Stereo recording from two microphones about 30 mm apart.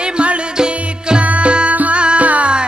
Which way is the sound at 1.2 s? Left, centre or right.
Right.